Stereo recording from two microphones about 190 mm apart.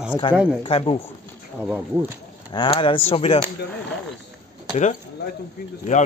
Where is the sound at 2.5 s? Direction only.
25° left (ahead or behind).